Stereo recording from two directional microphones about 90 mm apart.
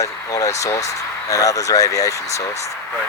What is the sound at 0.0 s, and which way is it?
Speech, 40° left (ahead or behind).